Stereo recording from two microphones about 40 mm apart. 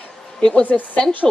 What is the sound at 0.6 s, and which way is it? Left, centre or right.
Speech, left.